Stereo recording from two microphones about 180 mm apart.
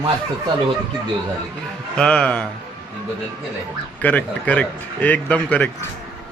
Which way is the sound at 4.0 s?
10° left (ahead or behind).